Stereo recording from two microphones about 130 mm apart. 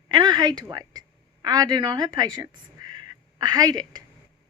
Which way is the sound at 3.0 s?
30° right (ahead or behind).